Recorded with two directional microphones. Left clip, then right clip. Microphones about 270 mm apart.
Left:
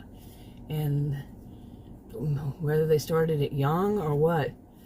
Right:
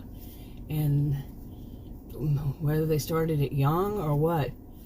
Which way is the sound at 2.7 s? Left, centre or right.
Left.